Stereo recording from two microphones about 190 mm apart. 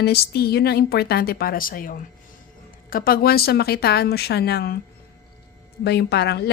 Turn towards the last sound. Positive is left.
turn(degrees=60)  # may be behind; listen again after turning